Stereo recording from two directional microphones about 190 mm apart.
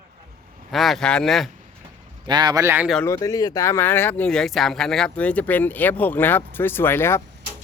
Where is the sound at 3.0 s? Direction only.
15° left (ahead or behind).